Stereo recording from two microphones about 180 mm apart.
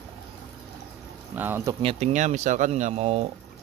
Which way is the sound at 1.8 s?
35° right (ahead or behind).